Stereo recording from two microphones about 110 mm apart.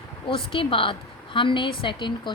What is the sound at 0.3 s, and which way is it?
A woman's voice, 55° left (ahead or behind).